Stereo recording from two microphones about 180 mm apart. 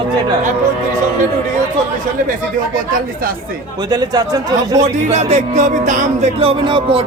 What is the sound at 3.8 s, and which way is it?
Speech, 20° right (ahead or behind).